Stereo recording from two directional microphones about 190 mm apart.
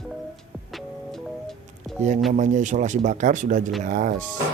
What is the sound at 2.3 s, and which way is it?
Speech, 40° right (ahead or behind).